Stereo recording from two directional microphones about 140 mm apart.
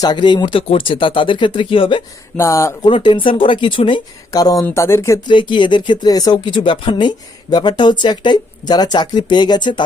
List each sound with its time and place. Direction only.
0.0 s speech: 30° left (ahead or behind)
2.3 s speech: 20° left (ahead or behind)
2.8 s speech: 35° left (ahead or behind)
4.3 s speech: 25° left (ahead or behind)
5.3 s speech: 35° left (ahead or behind)